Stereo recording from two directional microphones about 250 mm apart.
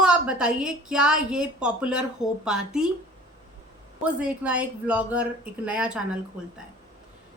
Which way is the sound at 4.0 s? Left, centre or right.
Centre.